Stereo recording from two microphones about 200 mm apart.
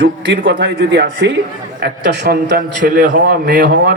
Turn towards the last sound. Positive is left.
turn(degrees=-55)  # may be behind; listen again after turning